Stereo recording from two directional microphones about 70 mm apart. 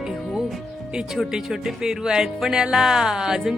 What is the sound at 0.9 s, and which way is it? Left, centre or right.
Speech, centre.